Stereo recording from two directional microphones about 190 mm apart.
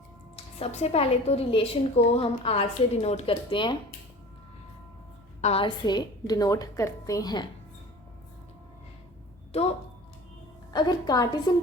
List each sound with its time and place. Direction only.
0.6 s a woman's voice: 30° left (ahead or behind)
5.4 s a woman's voice: 30° left (ahead or behind)
9.5 s a woman's voice: 30° left (ahead or behind)